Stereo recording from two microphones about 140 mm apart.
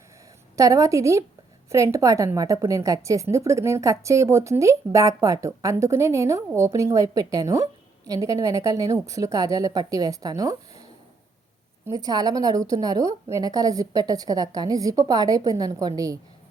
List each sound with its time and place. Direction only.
0.5 s a woman's voice: 25° right (ahead or behind)
11.9 s a woman's voice: 25° right (ahead or behind)